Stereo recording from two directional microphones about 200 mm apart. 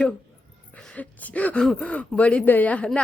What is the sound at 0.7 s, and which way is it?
Speech, 5° left (ahead or behind).